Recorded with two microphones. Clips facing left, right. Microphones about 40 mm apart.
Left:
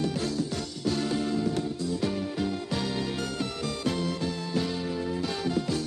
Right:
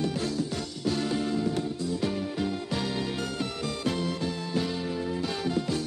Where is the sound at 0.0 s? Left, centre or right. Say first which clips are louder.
Even; centre.